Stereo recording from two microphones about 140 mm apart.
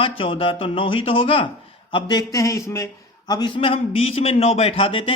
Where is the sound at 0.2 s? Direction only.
40° left (ahead or behind).